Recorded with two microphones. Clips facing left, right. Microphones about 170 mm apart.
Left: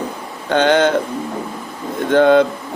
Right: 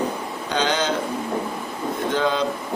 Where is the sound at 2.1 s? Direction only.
60° left (ahead or behind).